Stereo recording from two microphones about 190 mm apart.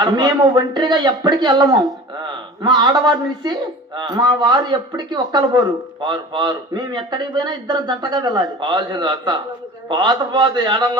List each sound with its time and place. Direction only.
0.0 s a man's voice: 20° right (ahead or behind)